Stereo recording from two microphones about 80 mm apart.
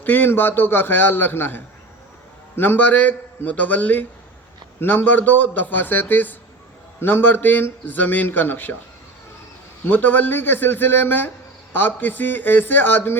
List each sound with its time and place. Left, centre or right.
0.0 s a man's voice: left
9.8 s a man's voice: left